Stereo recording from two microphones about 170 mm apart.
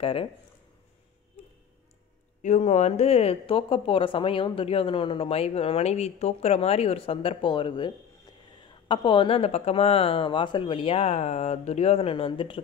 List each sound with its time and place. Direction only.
0.0 s a woman's voice: 35° left (ahead or behind)
2.4 s a woman's voice: 45° left (ahead or behind)